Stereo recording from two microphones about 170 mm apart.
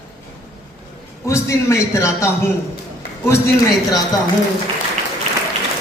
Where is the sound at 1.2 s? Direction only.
15° left (ahead or behind).